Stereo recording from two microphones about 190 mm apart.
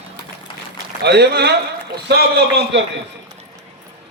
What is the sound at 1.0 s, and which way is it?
A man's voice, 60° right (ahead or behind).